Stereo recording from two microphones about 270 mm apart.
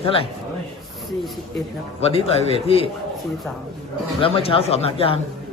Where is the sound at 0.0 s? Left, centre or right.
Left.